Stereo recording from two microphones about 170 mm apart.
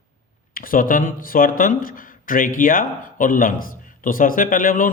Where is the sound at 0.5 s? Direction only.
55° left (ahead or behind).